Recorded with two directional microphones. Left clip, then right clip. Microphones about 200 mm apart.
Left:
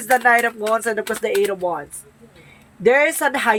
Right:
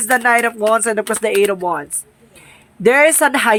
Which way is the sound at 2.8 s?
35° right (ahead or behind).